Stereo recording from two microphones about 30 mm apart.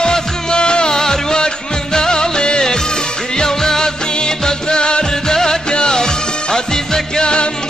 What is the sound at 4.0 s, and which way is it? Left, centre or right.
Music, left.